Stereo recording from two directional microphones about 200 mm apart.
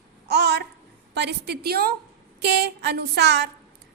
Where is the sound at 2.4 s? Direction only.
55° right (ahead or behind).